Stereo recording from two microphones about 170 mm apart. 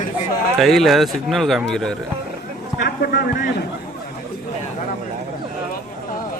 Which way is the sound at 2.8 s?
65° left (ahead or behind).